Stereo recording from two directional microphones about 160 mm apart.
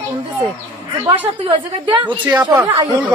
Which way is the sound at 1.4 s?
30° right (ahead or behind).